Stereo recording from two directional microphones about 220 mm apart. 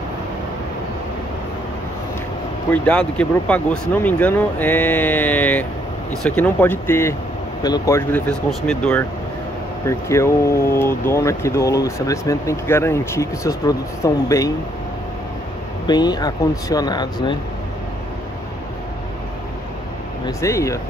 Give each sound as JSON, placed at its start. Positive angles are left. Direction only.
{"t": 2.7, "sound": "speech", "side_deg": 5}
{"t": 15.9, "sound": "speech", "side_deg": 20}
{"t": 20.2, "sound": "speech", "side_deg": 15}